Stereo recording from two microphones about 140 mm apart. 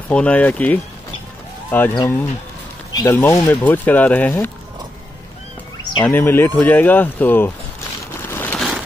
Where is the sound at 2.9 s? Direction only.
20° left (ahead or behind).